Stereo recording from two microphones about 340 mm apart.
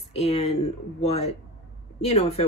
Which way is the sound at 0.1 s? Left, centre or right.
Centre.